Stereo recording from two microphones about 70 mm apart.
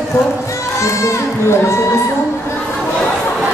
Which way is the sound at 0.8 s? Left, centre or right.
Left.